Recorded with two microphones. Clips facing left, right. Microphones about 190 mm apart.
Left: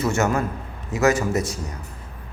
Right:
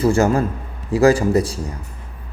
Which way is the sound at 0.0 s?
30° right (ahead or behind).